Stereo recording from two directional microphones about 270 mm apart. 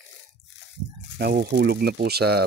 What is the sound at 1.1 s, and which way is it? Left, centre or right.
Speech, right.